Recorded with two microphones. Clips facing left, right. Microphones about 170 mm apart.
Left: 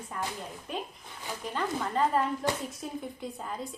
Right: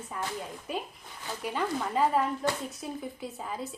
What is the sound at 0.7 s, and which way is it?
A woman's voice, 5° right (ahead or behind).